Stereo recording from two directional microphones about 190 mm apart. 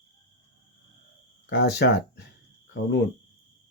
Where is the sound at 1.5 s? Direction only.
65° left (ahead or behind).